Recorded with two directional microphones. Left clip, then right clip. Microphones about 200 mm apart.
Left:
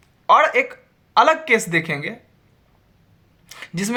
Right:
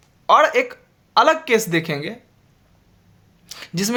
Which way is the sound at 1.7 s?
35° right (ahead or behind).